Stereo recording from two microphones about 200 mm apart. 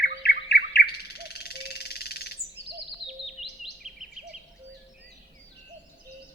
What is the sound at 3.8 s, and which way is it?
Bird vocalization, centre (ahead or behind).